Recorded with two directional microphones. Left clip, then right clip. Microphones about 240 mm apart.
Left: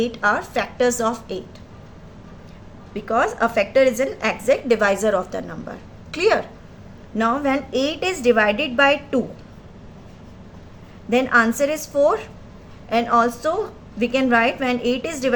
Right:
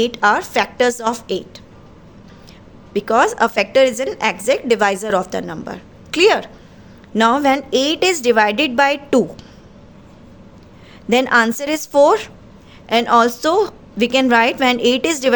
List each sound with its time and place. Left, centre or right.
0.0 s a woman's voice: right
2.9 s a woman's voice: right
11.1 s a woman's voice: right